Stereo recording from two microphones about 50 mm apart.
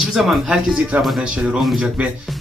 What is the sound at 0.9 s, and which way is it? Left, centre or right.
Speech, right.